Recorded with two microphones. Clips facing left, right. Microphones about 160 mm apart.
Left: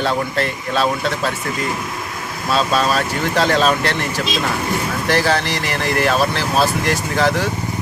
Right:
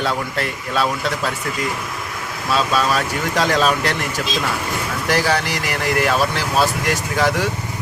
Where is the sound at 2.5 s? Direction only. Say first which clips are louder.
Left 1 dB; 25° left (ahead or behind).